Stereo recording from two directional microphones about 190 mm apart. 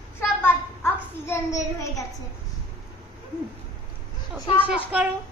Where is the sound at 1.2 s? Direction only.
15° left (ahead or behind).